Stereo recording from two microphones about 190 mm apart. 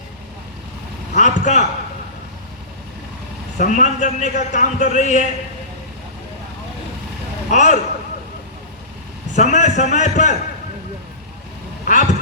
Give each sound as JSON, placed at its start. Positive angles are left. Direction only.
{"t": 1.1, "sound": "a man's voice", "side_deg": 40}
{"t": 3.6, "sound": "a man's voice", "side_deg": 40}
{"t": 7.5, "sound": "a man's voice", "side_deg": 40}
{"t": 9.3, "sound": "a man's voice", "side_deg": 40}
{"t": 11.9, "sound": "a man's voice", "side_deg": 40}